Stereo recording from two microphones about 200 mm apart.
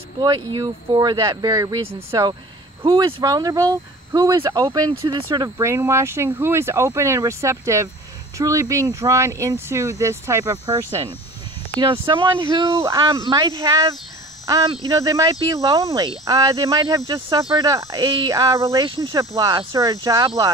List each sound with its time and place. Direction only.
0.2 s speech: 20° right (ahead or behind)
12.1 s speech: 25° right (ahead or behind)